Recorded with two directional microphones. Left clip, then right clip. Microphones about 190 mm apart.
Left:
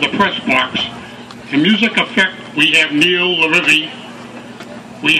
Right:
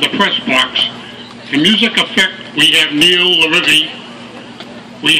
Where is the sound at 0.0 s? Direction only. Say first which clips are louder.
Right 2 dB; 30° left (ahead or behind).